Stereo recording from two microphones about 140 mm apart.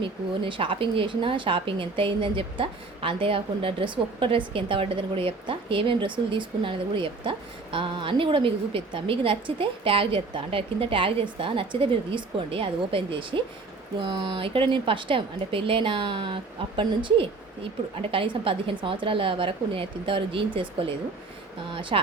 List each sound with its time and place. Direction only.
0.0 s speech: 35° right (ahead or behind)